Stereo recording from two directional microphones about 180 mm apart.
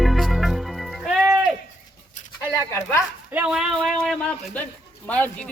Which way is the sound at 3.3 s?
5° right (ahead or behind).